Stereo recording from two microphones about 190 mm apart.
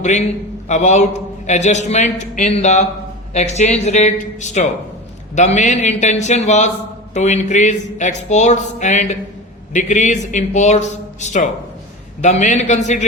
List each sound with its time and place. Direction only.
0.0 s speech: 40° left (ahead or behind)